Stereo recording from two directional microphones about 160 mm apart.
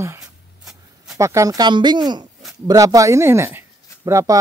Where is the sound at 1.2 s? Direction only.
20° right (ahead or behind).